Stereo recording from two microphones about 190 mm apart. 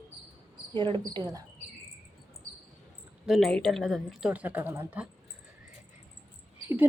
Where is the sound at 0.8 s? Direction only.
25° right (ahead or behind).